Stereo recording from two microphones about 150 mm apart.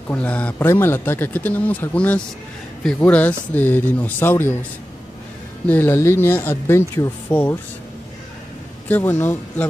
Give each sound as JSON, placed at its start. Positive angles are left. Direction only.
{"t": 0.1, "sound": "speech", "side_deg": 10}
{"t": 5.7, "sound": "speech", "side_deg": 15}
{"t": 8.8, "sound": "speech", "side_deg": 10}